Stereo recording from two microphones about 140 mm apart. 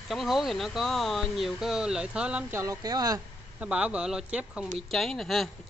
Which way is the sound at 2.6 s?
25° right (ahead or behind).